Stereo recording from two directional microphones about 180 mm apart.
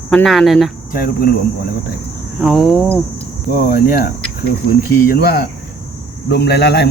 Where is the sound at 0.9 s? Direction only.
55° left (ahead or behind).